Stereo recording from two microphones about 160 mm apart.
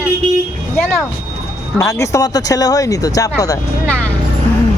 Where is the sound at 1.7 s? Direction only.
20° left (ahead or behind).